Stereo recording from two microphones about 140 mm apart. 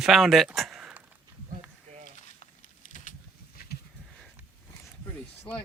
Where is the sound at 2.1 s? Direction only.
60° left (ahead or behind).